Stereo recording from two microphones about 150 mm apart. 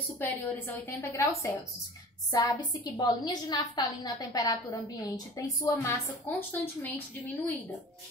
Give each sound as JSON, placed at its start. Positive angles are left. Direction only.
{"t": 0.2, "sound": "a woman's voice", "side_deg": 15}